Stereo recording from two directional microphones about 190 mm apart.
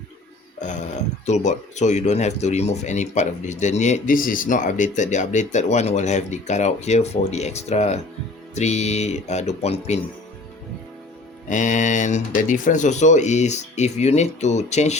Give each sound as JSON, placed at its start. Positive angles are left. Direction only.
{"t": 1.3, "sound": "speech", "side_deg": 40}
{"t": 11.4, "sound": "speech", "side_deg": 40}